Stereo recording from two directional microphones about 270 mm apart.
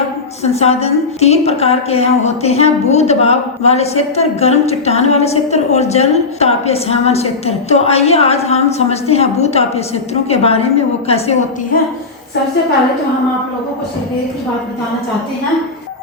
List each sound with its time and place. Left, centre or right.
0.4 s a woman's voice: left